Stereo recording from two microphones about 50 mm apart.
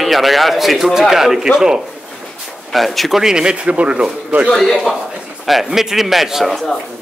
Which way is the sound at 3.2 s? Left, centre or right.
Centre.